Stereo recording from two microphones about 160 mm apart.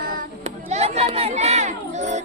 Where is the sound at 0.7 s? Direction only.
40° right (ahead or behind).